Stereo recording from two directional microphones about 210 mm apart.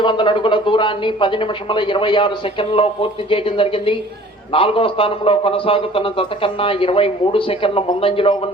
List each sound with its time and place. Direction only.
0.0 s a man's voice: 20° left (ahead or behind)